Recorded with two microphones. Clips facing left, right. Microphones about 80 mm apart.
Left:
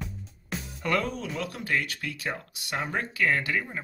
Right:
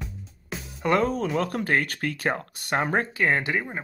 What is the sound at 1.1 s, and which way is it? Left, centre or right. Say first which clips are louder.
Speech: right 8 dB; right.